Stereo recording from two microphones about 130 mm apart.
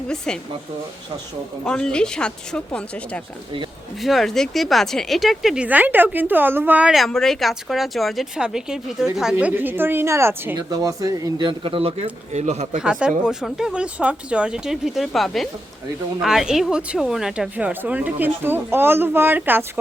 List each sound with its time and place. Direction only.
1.6 s speech: 5° left (ahead or behind)
5.6 s speech: 15° right (ahead or behind)
6.9 s a man's voice: centre (ahead or behind); by 12.8 s 60° right (ahead or behind)
12.8 s speech: 5° right (ahead or behind)